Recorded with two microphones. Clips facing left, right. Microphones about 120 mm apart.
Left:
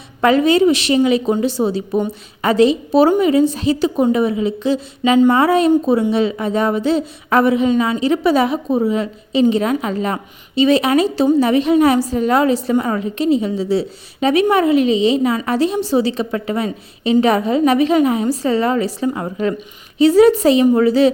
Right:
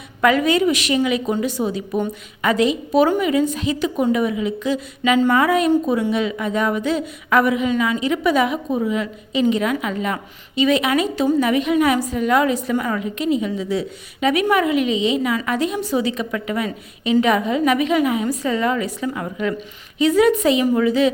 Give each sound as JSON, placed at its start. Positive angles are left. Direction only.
{"t": 0.2, "sound": "a woman's voice", "side_deg": 30}